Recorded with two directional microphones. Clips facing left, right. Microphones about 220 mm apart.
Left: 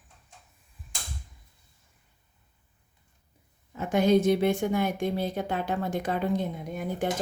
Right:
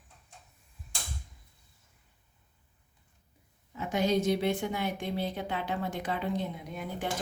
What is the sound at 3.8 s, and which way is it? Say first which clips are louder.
A woman's voice: left 6 dB; 50° left (ahead or behind).